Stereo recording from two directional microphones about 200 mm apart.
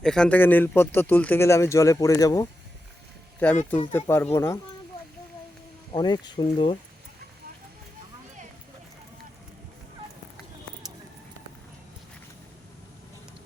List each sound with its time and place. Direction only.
0.0 s speech: 5° left (ahead or behind)
5.9 s speech: 20° left (ahead or behind)